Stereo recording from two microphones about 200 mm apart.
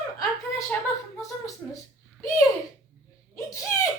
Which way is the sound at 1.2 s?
15° left (ahead or behind).